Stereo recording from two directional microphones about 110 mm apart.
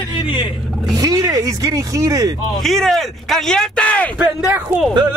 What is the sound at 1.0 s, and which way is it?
Speech, 35° right (ahead or behind).